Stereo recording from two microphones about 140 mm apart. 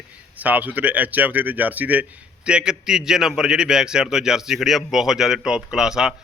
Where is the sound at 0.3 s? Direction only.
10° right (ahead or behind).